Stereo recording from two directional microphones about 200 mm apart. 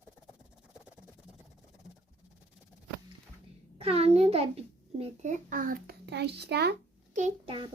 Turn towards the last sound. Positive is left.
turn(degrees=-35)  # may be behind; listen again after turning